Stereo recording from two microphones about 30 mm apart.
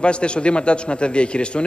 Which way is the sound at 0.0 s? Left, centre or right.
Left.